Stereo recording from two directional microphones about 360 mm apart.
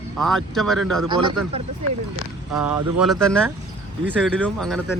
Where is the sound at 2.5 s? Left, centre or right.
Centre.